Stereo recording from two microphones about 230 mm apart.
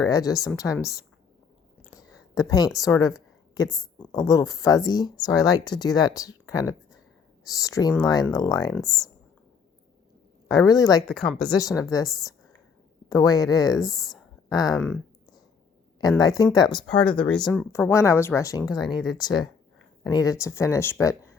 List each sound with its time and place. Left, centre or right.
0.0 s speech: centre
1.9 s a sound: centre
2.8 s speech: centre
8.7 s speech: centre
10.5 s speech: centre
11.1 s speech: centre
11.4 s speech: centre
13.9 s speech: centre
14.5 s speech: centre
17.0 s speech: centre